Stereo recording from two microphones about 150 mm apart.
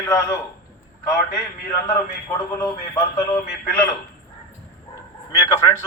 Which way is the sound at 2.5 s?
25° left (ahead or behind).